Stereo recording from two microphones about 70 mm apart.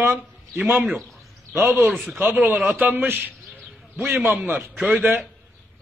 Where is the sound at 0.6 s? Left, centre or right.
Right.